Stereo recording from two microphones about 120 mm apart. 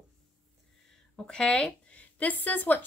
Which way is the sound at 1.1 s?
5° left (ahead or behind).